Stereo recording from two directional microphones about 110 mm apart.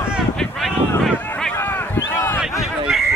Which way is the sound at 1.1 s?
15° left (ahead or behind).